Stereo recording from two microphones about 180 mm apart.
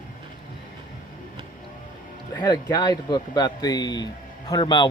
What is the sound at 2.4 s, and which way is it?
Speech, 20° left (ahead or behind).